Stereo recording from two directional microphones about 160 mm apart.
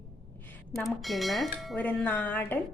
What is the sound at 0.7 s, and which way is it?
Speech, centre (ahead or behind).